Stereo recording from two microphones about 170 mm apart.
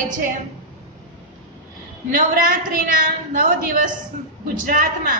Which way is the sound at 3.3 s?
55° right (ahead or behind).